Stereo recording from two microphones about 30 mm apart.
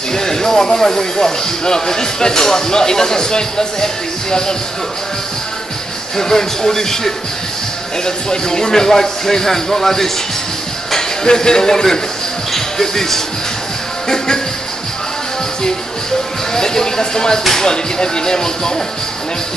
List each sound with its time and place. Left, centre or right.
0.1 s speech: centre
6.1 s speech: centre
11.2 s speech: left
16.5 s speech: left